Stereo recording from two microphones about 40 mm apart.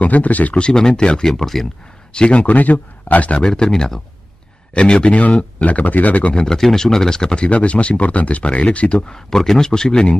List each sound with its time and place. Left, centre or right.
0.0 s speech: left
0.6 s speech: centre
1.3 s speech: centre
2.1 s speech: left
2.5 s speech: left
3.4 s speech: centre
4.7 s speech: left
6.3 s speech: centre
7.4 s speech: left
9.0 s speech: centre